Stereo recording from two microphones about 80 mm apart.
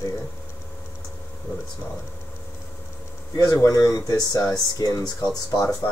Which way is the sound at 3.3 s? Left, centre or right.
Left.